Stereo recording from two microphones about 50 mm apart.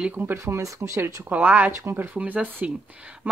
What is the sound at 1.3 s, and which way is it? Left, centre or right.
Speech, right.